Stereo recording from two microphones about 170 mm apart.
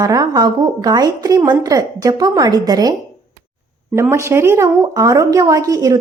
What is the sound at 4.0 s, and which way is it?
A woman's voice, 15° right (ahead or behind).